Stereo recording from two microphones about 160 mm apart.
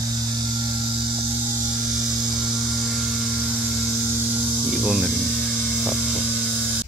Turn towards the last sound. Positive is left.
turn(degrees=-5)  # may be behind; listen again after turning